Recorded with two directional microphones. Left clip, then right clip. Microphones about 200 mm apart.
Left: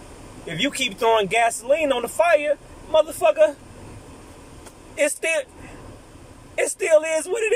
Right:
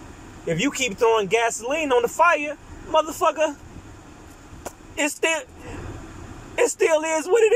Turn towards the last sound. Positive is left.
turn(degrees=20)  # may be behind; listen again after turning